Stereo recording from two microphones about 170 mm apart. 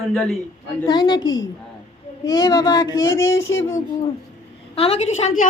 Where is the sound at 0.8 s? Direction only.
25° left (ahead or behind).